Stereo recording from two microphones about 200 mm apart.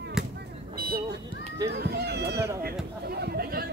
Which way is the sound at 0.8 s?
50° right (ahead or behind).